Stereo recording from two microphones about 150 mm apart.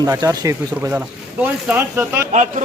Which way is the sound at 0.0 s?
20° right (ahead or behind).